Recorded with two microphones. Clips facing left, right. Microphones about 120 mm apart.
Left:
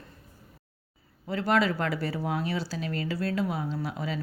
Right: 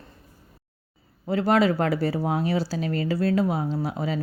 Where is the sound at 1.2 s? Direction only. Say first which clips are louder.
Right 5 dB; 40° right (ahead or behind).